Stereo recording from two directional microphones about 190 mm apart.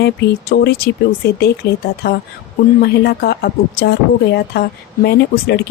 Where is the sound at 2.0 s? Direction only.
55° left (ahead or behind).